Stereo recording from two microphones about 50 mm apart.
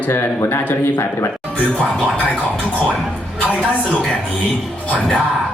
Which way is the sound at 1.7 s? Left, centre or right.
Left.